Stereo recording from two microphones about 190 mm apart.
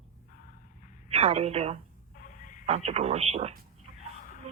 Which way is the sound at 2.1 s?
45° left (ahead or behind).